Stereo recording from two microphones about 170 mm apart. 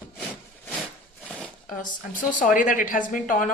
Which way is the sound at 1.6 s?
50° left (ahead or behind).